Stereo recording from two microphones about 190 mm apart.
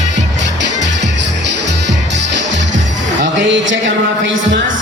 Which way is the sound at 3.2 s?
75° right (ahead or behind).